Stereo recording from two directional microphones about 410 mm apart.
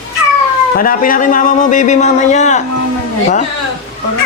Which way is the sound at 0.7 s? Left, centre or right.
Centre.